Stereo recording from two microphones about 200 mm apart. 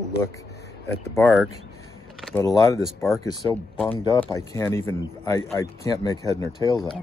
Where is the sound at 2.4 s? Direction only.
15° left (ahead or behind).